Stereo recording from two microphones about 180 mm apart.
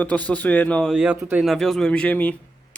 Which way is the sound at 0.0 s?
10° left (ahead or behind).